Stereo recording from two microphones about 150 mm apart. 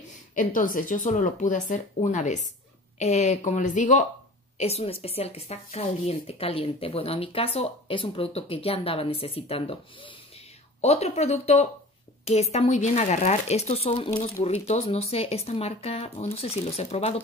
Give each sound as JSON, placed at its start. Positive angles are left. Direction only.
{"t": 0.3, "sound": "speech", "side_deg": 60}
{"t": 4.6, "sound": "speech", "side_deg": 45}